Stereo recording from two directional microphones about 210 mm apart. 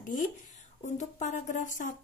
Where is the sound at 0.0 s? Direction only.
40° left (ahead or behind).